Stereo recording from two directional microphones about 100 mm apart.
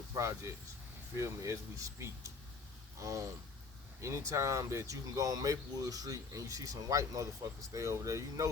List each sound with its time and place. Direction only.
0.2 s speech: 30° right (ahead or behind)